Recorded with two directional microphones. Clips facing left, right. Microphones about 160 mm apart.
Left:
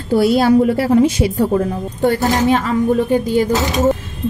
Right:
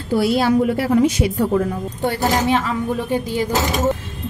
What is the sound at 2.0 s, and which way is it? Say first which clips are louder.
Speech: left 4 dB; 45° left (ahead or behind).